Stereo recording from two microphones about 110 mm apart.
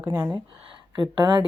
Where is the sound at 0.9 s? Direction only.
45° right (ahead or behind).